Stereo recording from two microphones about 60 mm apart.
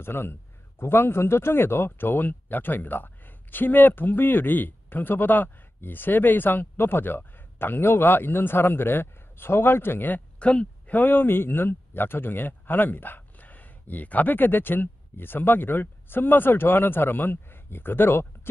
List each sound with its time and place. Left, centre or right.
0.0 s a man's voice: left
10.4 s speech: centre
11.0 s a man's voice: left